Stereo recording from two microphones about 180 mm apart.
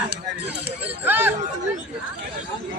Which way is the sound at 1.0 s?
10° right (ahead or behind).